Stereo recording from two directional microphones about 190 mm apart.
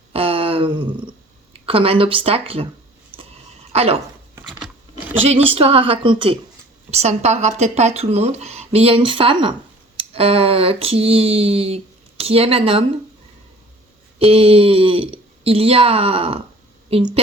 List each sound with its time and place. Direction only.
0.1 s a sound: 30° right (ahead or behind)
1.5 s speech: 30° right (ahead or behind)
3.7 s speech: 30° right (ahead or behind)
5.3 s speech: 30° right (ahead or behind)
6.9 s a sound: 35° right (ahead or behind)
14.2 s speech: 30° right (ahead or behind)